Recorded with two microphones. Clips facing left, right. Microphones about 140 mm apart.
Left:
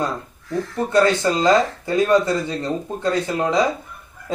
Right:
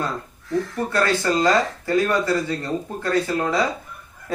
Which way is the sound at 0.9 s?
20° left (ahead or behind).